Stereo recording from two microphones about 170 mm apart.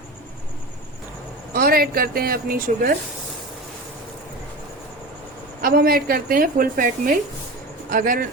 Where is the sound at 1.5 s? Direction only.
60° right (ahead or behind).